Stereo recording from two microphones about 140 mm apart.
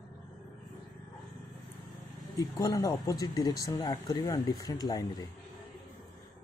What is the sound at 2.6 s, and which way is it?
Speech, 20° left (ahead or behind).